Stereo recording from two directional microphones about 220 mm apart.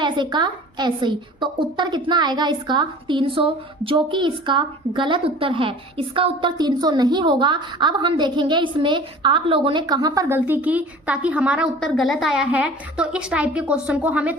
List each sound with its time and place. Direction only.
0.0 s a woman's voice: 20° right (ahead or behind)